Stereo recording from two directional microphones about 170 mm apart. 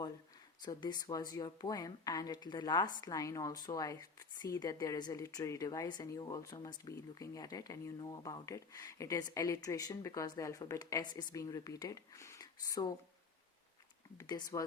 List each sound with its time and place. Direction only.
0.6 s speech: 25° left (ahead or behind)
14.2 s speech: 20° left (ahead or behind)